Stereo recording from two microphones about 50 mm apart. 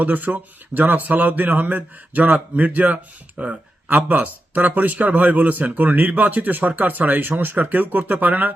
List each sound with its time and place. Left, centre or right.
0.0 s a man's voice: right
3.3 s speech: centre
3.9 s a man's voice: right